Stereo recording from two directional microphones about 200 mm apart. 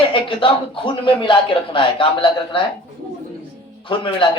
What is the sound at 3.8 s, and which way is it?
Speech, 25° left (ahead or behind).